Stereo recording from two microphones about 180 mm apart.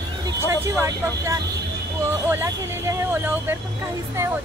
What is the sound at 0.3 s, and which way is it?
Speech, 15° right (ahead or behind).